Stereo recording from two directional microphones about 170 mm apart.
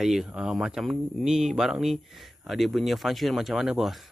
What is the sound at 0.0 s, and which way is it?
Speech, centre (ahead or behind).